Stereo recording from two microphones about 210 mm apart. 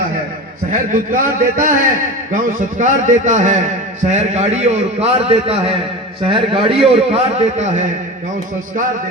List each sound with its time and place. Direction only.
0.7 s a man's voice: 40° right (ahead or behind)